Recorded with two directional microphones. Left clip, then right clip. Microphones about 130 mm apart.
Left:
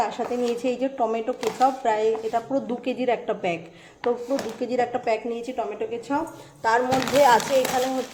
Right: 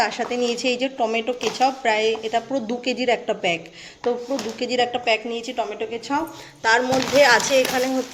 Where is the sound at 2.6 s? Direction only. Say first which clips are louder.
Right 3 dB; centre (ahead or behind).